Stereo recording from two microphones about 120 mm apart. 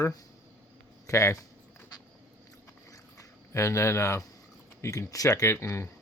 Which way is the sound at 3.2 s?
25° left (ahead or behind).